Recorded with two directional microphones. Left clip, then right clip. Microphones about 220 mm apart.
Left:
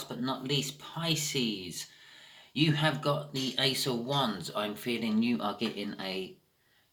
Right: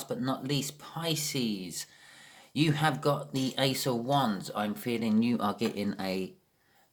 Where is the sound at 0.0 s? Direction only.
50° right (ahead or behind).